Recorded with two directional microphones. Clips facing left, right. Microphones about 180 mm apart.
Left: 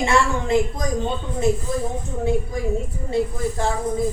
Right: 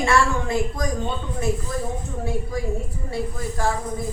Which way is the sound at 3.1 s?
25° left (ahead or behind).